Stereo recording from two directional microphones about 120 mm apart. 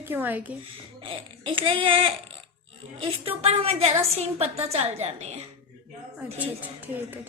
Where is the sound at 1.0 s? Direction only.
45° right (ahead or behind); by 5.3 s 60° right (ahead or behind).